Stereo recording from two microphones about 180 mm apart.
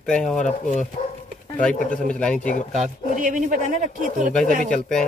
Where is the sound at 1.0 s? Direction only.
40° left (ahead or behind).